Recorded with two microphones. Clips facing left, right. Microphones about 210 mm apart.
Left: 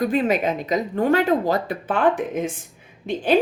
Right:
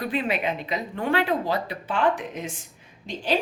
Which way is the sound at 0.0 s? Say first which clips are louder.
Left 6 dB; 45° left (ahead or behind).